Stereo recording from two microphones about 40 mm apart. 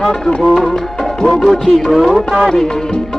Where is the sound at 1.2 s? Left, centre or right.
Centre.